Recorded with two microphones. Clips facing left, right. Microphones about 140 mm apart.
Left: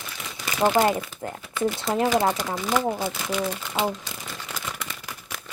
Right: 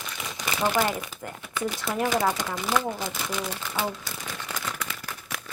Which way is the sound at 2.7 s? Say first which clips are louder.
Left 4 dB; 20° left (ahead or behind).